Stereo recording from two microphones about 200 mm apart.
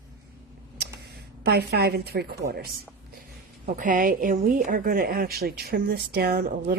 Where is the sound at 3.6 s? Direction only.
40° right (ahead or behind).